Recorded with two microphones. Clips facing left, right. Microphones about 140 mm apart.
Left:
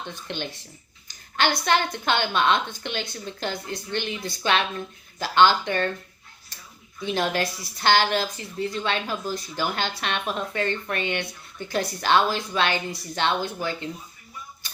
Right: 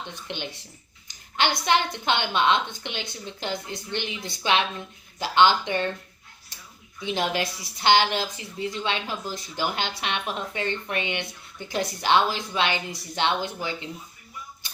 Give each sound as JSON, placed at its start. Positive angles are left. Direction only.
{"t": 0.1, "sound": "a woman's voice", "side_deg": -15}
{"t": 6.5, "sound": "a sound", "side_deg": -20}
{"t": 7.0, "sound": "a woman's voice", "side_deg": -15}